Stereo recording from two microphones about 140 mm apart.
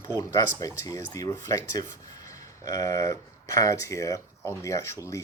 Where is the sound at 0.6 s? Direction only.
25° left (ahead or behind).